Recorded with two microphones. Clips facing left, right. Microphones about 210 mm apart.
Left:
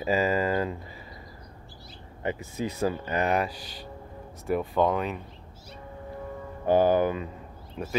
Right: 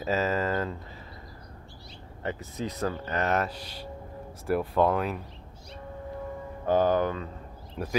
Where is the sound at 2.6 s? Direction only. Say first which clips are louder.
Left 3 dB; 15° left (ahead or behind); by 5.2 s 5° right (ahead or behind).